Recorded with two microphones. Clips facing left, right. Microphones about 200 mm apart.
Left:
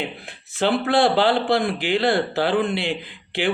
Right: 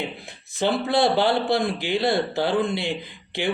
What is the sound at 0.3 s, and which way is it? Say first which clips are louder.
Speech: left 2 dB; 70° left (ahead or behind).